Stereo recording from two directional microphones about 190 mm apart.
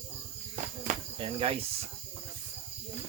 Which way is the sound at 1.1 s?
30° right (ahead or behind).